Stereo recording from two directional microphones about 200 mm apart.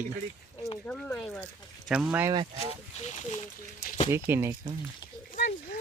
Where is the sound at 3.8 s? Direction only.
35° left (ahead or behind).